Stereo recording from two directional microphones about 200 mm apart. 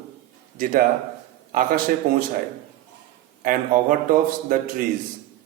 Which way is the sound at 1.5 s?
45° right (ahead or behind).